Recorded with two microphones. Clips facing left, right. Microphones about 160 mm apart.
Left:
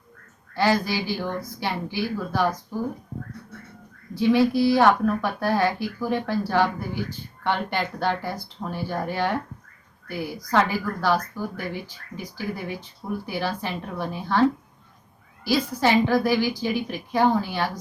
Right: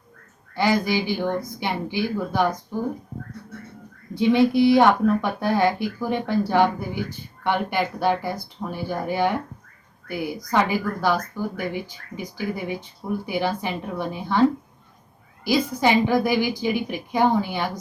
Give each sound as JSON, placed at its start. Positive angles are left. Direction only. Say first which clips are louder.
{"t": 0.5, "sound": "speech", "louder": "right 1 dB", "side_deg": -15}
{"t": 4.1, "sound": "speech", "louder": "right 1 dB", "side_deg": -20}
{"t": 15.4, "sound": "speech", "louder": "right 1 dB", "side_deg": -15}